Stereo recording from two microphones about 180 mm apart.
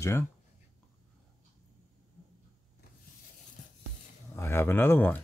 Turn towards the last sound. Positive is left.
turn(degrees=10)  # may be behind; listen again after turning